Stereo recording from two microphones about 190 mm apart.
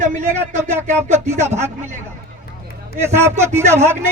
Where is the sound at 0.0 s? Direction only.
40° right (ahead or behind).